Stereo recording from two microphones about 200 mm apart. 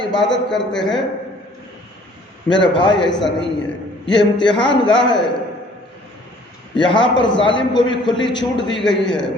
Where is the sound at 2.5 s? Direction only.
25° left (ahead or behind).